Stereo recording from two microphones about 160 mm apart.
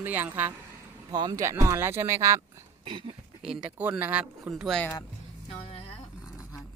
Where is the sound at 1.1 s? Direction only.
25° right (ahead or behind).